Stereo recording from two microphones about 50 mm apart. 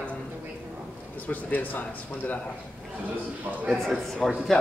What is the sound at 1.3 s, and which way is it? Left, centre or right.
Speech, left.